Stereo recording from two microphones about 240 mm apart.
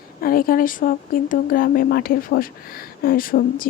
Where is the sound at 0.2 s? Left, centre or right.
Left.